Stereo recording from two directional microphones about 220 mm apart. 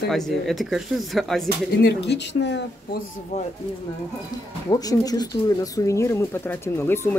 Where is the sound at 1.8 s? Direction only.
50° left (ahead or behind).